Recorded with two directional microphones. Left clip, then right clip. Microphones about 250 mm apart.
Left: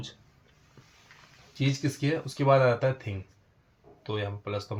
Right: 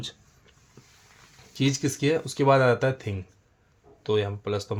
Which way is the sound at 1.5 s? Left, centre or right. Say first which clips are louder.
Right 5 dB; right.